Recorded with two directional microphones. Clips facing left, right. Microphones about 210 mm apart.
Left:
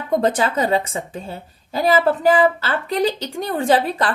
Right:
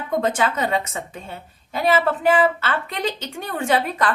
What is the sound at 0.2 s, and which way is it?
A woman's voice, 35° left (ahead or behind).